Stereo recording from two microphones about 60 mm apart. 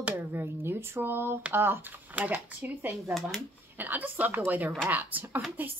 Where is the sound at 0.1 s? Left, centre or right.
Right.